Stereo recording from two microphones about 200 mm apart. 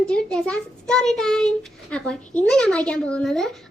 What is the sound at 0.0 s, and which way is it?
A child's voice, 5° left (ahead or behind).